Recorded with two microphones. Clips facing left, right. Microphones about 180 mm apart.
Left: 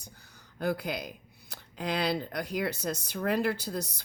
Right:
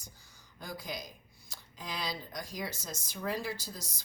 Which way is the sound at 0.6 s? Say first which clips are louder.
Left 10 dB; 65° left (ahead or behind).